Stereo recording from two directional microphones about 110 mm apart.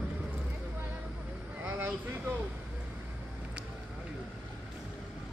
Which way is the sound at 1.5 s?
15° right (ahead or behind).